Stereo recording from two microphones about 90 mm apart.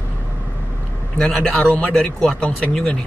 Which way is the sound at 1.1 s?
10° left (ahead or behind).